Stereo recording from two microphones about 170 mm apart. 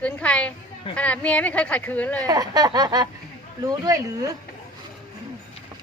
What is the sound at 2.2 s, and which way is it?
Speech, 20° right (ahead or behind).